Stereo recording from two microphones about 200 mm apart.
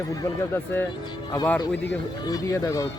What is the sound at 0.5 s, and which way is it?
Speech, 10° left (ahead or behind).